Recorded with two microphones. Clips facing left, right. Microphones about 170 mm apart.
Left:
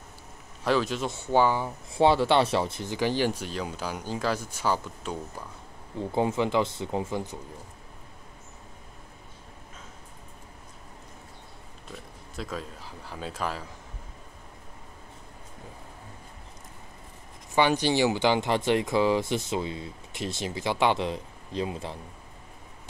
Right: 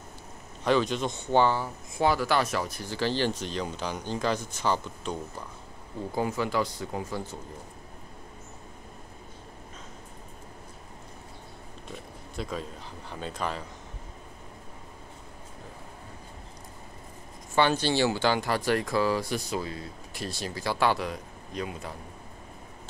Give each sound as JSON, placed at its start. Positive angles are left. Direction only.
{"t": 0.7, "sound": "speech", "side_deg": 5}
{"t": 1.6, "sound": "speech", "side_deg": 30}
{"t": 6.1, "sound": "speech", "side_deg": 25}
{"t": 11.9, "sound": "oink", "side_deg": 0}
{"t": 13.1, "sound": "speech", "side_deg": 5}
{"t": 17.6, "sound": "speech", "side_deg": 15}